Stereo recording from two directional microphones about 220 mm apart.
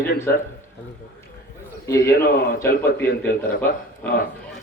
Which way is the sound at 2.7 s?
40° left (ahead or behind).